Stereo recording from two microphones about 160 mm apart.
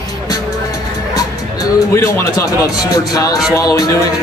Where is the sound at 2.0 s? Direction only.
20° left (ahead or behind).